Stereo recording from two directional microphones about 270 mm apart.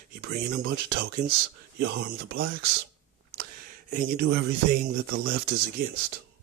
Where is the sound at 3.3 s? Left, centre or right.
Right.